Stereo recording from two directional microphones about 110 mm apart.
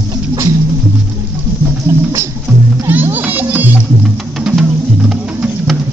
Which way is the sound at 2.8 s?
20° right (ahead or behind).